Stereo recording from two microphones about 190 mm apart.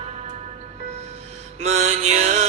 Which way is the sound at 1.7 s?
35° right (ahead or behind).